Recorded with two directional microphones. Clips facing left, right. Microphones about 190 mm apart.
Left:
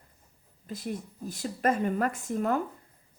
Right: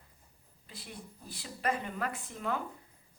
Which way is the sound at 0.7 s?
45° left (ahead or behind).